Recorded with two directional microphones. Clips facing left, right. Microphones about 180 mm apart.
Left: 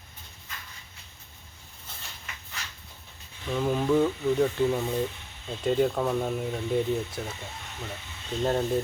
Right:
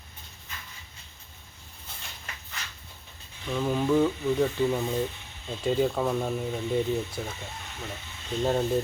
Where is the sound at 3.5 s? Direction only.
5° left (ahead or behind).